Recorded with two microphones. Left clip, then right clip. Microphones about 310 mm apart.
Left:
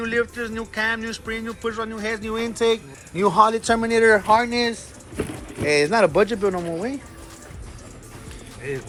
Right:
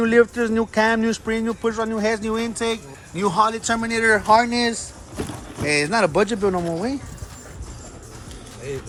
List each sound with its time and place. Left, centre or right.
0.0 s speech: right; by 6.9 s centre